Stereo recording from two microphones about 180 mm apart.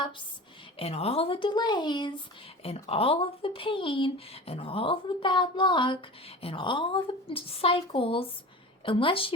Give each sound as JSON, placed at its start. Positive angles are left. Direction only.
{"t": 0.8, "sound": "a woman's voice", "side_deg": 35}